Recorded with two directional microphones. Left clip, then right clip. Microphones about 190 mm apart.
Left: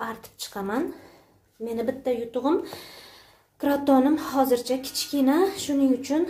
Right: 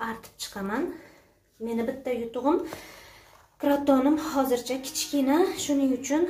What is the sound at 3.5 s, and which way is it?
A woman's voice, 35° left (ahead or behind).